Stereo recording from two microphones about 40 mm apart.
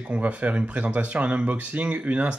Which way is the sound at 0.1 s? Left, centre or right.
Right.